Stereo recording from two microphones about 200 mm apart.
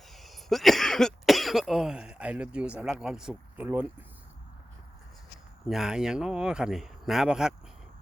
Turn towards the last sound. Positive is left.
turn(degrees=-5)  # may be behind; listen again after turning